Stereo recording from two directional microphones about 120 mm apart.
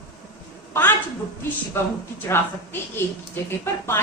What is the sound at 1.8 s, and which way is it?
A woman's voice, 20° left (ahead or behind).